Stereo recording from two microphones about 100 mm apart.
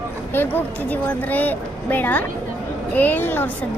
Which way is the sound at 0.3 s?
20° left (ahead or behind).